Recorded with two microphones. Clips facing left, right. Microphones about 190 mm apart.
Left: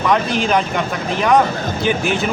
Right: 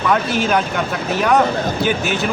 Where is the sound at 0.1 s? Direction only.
Centre (ahead or behind).